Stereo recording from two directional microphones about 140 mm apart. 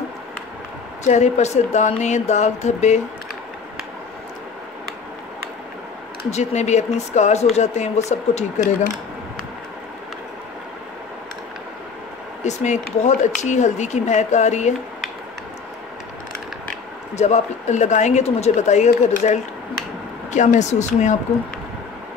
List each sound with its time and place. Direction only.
1.0 s speech: 55° left (ahead or behind)
6.3 s speech: 55° left (ahead or behind)
12.4 s speech: 55° left (ahead or behind)
17.1 s speech: 55° left (ahead or behind)